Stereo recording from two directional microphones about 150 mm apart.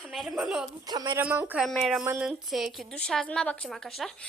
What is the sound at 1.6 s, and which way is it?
A woman's voice, centre (ahead or behind).